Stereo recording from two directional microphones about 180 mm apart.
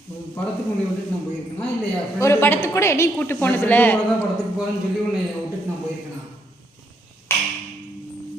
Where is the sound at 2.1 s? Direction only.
15° left (ahead or behind).